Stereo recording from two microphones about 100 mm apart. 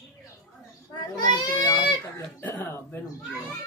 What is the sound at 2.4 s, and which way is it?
Speech, 25° left (ahead or behind).